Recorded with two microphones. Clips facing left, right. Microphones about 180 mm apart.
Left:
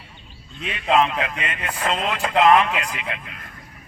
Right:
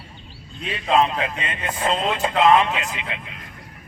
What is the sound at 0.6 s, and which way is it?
A man's voice, 30° right (ahead or behind).